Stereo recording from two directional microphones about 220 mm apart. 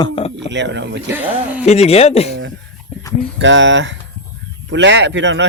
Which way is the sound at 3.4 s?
60° right (ahead or behind).